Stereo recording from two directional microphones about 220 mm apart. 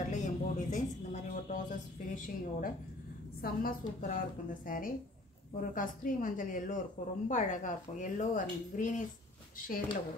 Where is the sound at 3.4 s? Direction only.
40° left (ahead or behind).